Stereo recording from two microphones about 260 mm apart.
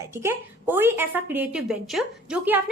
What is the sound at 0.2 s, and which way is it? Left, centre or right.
A woman's voice, centre.